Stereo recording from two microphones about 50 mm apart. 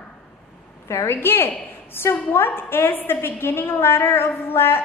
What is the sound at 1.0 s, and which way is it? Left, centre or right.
A woman's voice, left.